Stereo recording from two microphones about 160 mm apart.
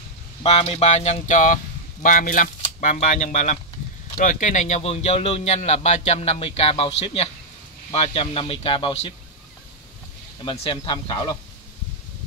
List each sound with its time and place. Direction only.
0.4 s speech: 40° left (ahead or behind)
10.4 s speech: 35° left (ahead or behind)